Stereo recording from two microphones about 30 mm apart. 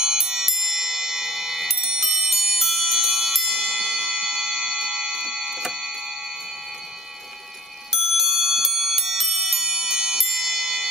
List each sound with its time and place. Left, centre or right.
0.0 s music: centre
3.8 s music: right
8.0 s clock: centre